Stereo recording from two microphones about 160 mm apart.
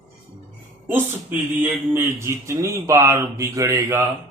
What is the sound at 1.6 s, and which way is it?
Speech, 15° right (ahead or behind).